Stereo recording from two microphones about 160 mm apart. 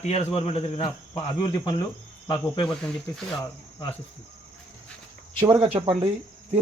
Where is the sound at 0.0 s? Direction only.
40° left (ahead or behind).